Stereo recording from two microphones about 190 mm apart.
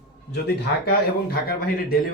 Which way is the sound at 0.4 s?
55° left (ahead or behind).